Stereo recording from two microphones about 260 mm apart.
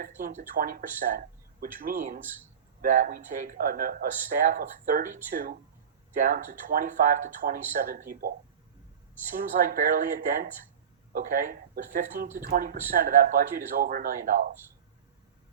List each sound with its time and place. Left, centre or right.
0.0 s speech: right
9.3 s speech: right